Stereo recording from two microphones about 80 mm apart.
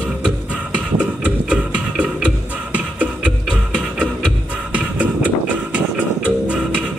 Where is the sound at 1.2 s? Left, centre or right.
Centre.